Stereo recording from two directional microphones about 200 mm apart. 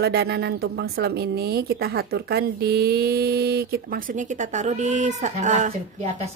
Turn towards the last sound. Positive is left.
turn(degrees=-35)  # may be behind; listen again after turning